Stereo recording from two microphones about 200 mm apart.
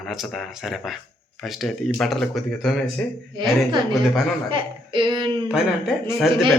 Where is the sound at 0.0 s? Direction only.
Centre (ahead or behind).